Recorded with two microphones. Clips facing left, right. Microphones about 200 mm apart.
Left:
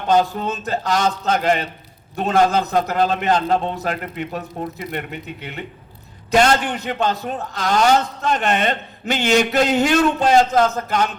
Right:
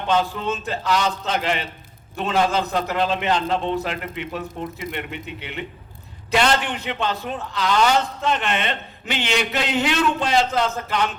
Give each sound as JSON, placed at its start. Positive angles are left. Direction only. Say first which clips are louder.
{"t": 0.1, "sound": "a man's voice", "louder": "left 4 dB", "side_deg": 40}